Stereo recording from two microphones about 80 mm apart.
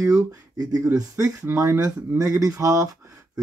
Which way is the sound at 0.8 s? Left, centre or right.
Right.